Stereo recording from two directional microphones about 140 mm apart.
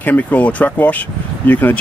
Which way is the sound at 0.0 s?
10° left (ahead or behind).